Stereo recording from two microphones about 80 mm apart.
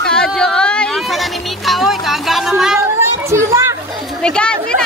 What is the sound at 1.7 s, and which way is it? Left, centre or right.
Music, centre.